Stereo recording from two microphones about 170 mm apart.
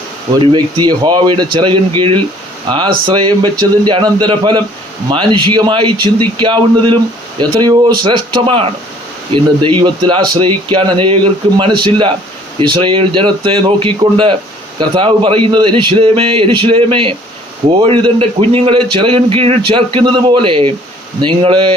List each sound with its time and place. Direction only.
0.3 s a man's voice: 25° right (ahead or behind)